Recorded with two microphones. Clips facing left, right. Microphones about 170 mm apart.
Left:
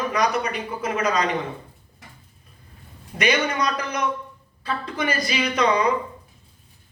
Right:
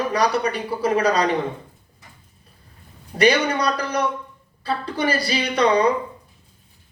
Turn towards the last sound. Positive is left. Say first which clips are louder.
# right 2 dB
turn(degrees=-35)  # may be behind; listen again after turning